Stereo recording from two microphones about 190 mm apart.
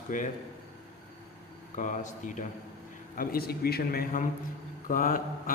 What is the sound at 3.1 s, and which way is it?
A man's voice, 55° left (ahead or behind).